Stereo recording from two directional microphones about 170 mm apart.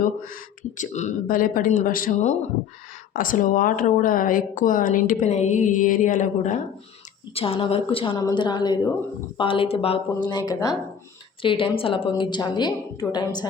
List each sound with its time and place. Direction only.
0.8 s speech: 45° left (ahead or behind)
7.3 s a woman's voice: 35° left (ahead or behind)